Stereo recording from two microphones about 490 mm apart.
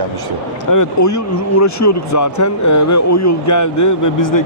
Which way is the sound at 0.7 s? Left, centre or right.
Left.